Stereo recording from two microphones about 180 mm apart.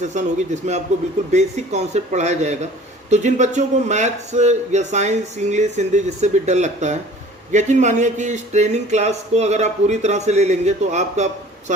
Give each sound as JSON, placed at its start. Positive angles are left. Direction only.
{"t": 0.0, "sound": "a man's voice", "side_deg": -40}